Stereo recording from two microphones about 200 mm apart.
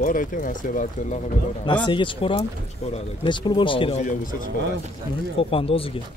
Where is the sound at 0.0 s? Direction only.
40° left (ahead or behind).